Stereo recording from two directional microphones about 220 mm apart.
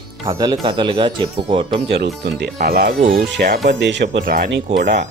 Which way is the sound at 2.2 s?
50° right (ahead or behind).